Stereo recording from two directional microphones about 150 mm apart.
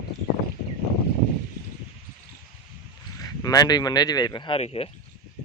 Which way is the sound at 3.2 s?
25° left (ahead or behind).